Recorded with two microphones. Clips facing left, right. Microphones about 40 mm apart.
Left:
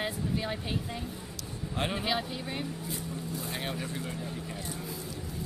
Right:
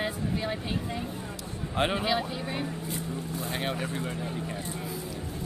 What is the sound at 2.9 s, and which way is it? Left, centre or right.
Vehicle, right.